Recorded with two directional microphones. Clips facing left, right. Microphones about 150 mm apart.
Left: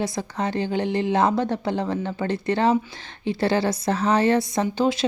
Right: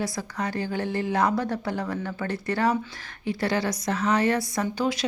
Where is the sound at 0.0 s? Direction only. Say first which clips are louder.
Left 4 dB; 25° left (ahead or behind).